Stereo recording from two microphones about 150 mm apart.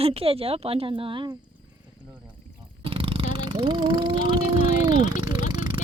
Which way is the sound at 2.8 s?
35° right (ahead or behind).